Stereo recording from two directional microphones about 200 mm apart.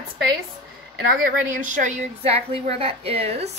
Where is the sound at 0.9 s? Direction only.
45° right (ahead or behind); by 3.4 s 30° right (ahead or behind).